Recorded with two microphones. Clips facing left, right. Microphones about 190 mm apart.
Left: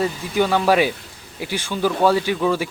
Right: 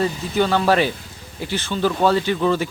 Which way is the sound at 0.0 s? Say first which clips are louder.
Even; 10° left (ahead or behind).